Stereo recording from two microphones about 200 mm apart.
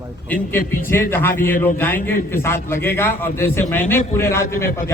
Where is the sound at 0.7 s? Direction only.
10° left (ahead or behind).